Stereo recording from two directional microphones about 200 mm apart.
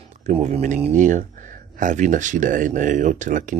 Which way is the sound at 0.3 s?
35° right (ahead or behind).